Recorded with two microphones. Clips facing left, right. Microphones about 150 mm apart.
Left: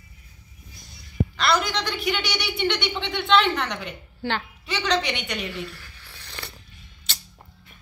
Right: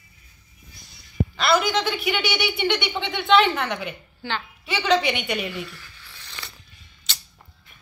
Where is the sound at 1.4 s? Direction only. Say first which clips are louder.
Right 3 dB; 5° right (ahead or behind).